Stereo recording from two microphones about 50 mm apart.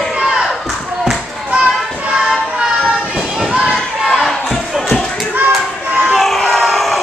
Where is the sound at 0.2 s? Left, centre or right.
Centre.